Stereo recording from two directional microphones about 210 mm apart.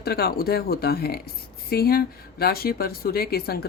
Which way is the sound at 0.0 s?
50° left (ahead or behind).